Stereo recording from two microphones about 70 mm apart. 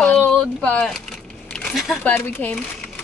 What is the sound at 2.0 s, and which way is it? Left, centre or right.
Speech, left.